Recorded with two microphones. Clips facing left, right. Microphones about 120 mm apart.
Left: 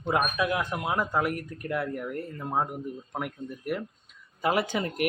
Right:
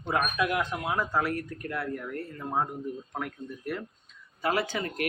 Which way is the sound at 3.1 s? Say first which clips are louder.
Left 2 dB; 10° left (ahead or behind).